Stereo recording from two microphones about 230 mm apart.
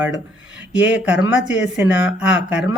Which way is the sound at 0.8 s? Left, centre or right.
Centre.